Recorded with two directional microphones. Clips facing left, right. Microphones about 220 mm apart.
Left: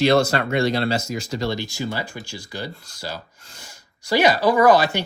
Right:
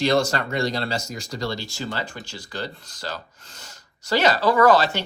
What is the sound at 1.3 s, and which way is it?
Speech, 25° left (ahead or behind).